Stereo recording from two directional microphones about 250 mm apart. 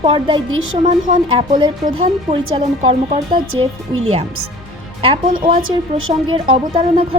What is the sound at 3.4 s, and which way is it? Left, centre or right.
Speech, right.